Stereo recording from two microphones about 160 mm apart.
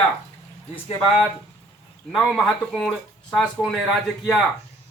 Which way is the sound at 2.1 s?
Centre (ahead or behind).